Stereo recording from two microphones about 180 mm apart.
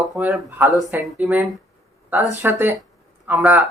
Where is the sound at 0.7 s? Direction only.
20° left (ahead or behind).